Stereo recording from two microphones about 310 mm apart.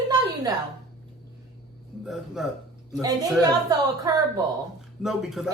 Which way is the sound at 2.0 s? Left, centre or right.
Centre.